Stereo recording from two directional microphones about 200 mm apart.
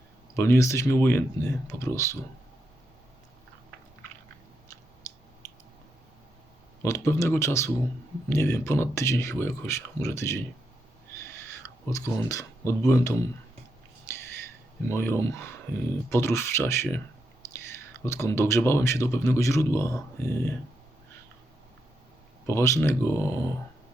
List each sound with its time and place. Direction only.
0.3 s a man's voice: 10° left (ahead or behind)
6.8 s a man's voice: 15° left (ahead or behind)
11.5 s speech: 15° left (ahead or behind)
14.1 s a sound: 15° left (ahead or behind)
14.8 s a man's voice: 15° left (ahead or behind)
18.0 s a man's voice: 15° left (ahead or behind)
22.4 s a man's voice: 15° left (ahead or behind)